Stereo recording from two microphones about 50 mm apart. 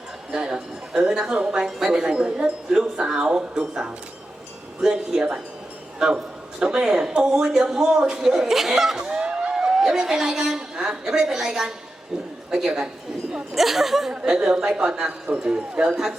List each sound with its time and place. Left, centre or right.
0.3 s a man's voice: centre
9.0 s a sound: centre
10.8 s a man's voice: centre
14.1 s a woman's voice: right